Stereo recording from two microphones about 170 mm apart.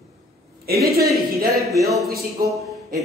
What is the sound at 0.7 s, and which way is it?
Speech, 65° right (ahead or behind).